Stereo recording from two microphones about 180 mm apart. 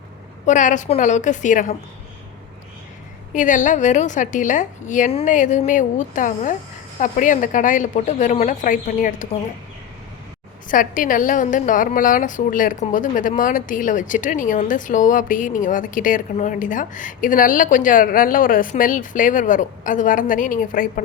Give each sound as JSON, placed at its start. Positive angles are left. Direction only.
{"t": 0.4, "sound": "a woman's voice", "side_deg": 45}
{"t": 3.3, "sound": "a woman's voice", "side_deg": 45}
{"t": 10.7, "sound": "a woman's voice", "side_deg": 50}